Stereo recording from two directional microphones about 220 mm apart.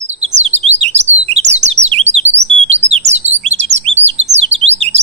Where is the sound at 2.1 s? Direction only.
30° right (ahead or behind).